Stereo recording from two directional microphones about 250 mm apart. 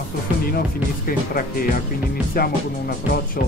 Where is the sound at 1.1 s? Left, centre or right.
Left.